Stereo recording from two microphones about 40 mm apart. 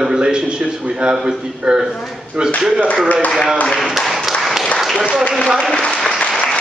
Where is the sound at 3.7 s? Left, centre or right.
Centre.